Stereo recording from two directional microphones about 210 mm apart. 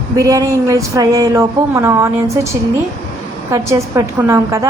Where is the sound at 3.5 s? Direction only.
15° right (ahead or behind).